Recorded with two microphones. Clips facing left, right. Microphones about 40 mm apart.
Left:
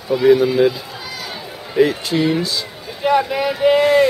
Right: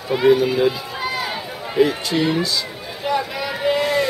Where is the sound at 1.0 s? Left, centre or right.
Right.